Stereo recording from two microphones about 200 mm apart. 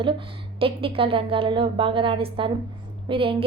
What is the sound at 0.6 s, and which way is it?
A woman's voice, 25° right (ahead or behind).